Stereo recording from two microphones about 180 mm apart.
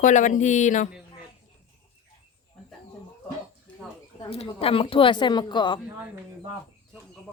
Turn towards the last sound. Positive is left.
turn(degrees=25)  # may be behind; listen again after turning